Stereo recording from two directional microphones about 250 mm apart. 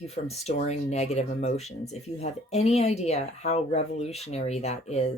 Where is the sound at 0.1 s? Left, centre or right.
Left.